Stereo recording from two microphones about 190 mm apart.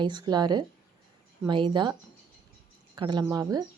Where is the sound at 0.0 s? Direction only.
20° right (ahead or behind).